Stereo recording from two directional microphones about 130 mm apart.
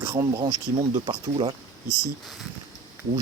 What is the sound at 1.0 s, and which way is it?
Speech, 40° right (ahead or behind).